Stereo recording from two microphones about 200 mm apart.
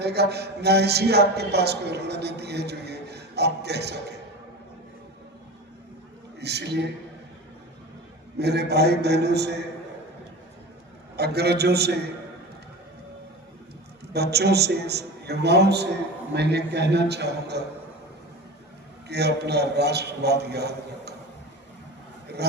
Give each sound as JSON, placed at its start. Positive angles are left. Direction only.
{"t": 0.0, "sound": "speech", "side_deg": -55}
{"t": 6.4, "sound": "speech", "side_deg": -55}
{"t": 8.4, "sound": "speech", "side_deg": -55}
{"t": 11.2, "sound": "a man's voice", "side_deg": -55}
{"t": 14.1, "sound": "speech", "side_deg": -55}
{"t": 19.0, "sound": "speech", "side_deg": -55}